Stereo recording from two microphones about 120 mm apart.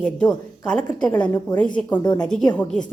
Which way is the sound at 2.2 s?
5° left (ahead or behind).